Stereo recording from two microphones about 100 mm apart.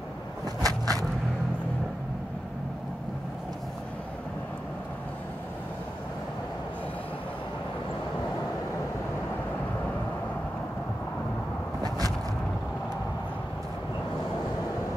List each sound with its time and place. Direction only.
0.6 s vehicle: 35° right (ahead or behind)